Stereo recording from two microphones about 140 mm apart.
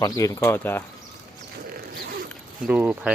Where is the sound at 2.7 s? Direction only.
10° right (ahead or behind).